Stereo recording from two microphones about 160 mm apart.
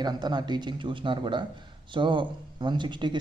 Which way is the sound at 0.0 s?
25° right (ahead or behind).